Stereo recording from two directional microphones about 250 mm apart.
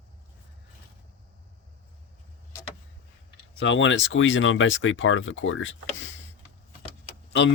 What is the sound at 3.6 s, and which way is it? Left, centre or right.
Speech, left.